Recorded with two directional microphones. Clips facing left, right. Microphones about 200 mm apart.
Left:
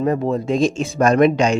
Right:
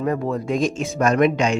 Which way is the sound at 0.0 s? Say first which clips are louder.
Left 4 dB; 25° left (ahead or behind).